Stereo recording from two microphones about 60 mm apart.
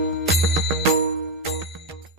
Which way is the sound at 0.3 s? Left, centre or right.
Centre.